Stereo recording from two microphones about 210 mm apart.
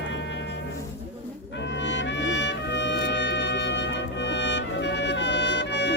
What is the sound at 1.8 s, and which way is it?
Music, 60° left (ahead or behind).